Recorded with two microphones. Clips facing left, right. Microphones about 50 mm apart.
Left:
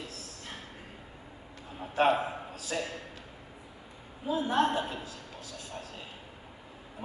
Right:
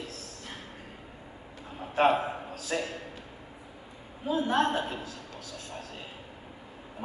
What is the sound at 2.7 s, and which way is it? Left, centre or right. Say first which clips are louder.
Speech: right 3 dB; right.